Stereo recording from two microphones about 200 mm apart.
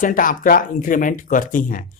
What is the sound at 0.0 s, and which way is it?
Speech, 40° left (ahead or behind).